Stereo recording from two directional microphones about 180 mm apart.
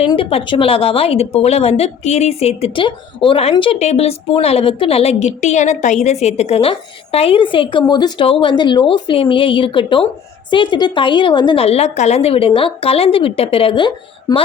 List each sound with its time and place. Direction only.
0.1 s speech: 30° left (ahead or behind)